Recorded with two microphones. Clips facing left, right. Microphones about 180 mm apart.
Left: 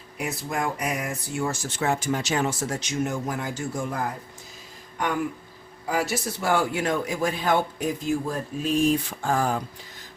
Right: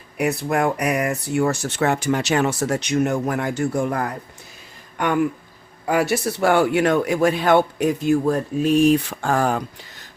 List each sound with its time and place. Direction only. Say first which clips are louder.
0.2 s a man's voice: right 8 dB; 65° right (ahead or behind)